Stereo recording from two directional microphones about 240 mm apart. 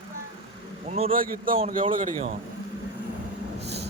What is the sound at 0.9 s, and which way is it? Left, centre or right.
Speech, right.